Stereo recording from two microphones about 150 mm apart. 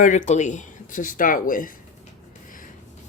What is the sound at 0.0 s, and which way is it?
A woman's voice, 55° left (ahead or behind).